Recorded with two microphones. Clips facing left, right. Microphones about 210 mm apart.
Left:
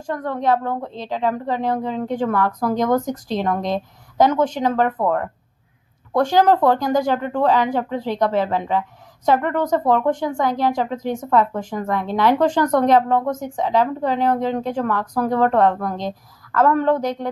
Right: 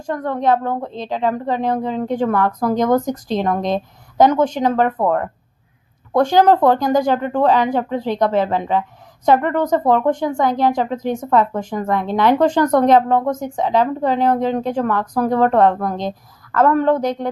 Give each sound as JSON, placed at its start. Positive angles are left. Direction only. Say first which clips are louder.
{"t": 0.0, "sound": "speech", "louder": "right 3 dB", "side_deg": -20}
{"t": 4.9, "sound": "speech", "louder": "right 2 dB", "side_deg": -35}
{"t": 6.1, "sound": "speech", "louder": "right 3 dB", "side_deg": -20}